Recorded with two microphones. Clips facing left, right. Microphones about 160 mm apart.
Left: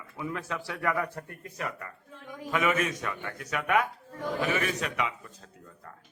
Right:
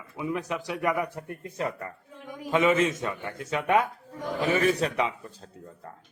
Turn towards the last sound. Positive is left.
turn(degrees=-30)  # may be behind; listen again after turning